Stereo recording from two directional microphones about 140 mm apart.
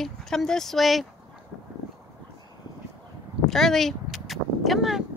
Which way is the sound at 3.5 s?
Centre (ahead or behind).